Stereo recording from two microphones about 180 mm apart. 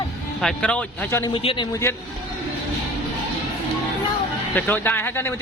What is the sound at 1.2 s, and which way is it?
Speech, 30° left (ahead or behind).